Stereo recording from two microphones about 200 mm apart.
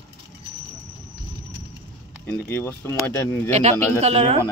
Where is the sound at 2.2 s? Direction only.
10° left (ahead or behind).